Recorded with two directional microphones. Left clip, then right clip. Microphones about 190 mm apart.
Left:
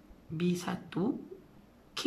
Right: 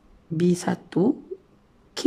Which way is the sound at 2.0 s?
35° right (ahead or behind).